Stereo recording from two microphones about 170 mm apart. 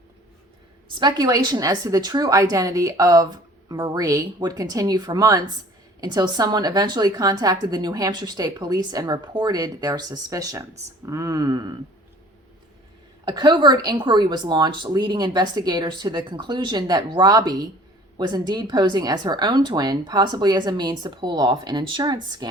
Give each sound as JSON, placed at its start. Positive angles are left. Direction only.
{"t": 0.9, "sound": "a woman's voice", "side_deg": -25}
{"t": 13.2, "sound": "a woman's voice", "side_deg": -25}